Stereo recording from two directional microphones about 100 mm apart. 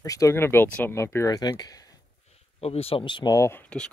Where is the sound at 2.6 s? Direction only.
85° left; by 3.3 s 55° left (ahead or behind).